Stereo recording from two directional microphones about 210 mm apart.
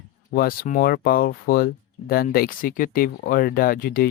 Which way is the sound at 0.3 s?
45° left (ahead or behind).